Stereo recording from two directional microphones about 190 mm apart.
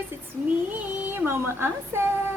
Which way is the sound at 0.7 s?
10° right (ahead or behind).